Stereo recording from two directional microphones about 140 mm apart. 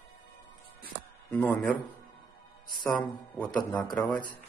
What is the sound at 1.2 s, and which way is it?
Speech, 10° left (ahead or behind).